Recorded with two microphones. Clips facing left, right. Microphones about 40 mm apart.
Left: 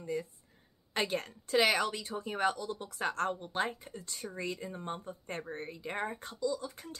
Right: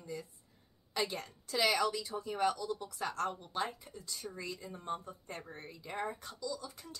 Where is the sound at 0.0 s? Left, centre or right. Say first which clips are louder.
Left 7 dB; left.